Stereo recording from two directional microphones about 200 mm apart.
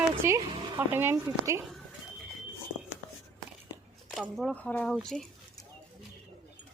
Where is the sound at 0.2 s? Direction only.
10° right (ahead or behind).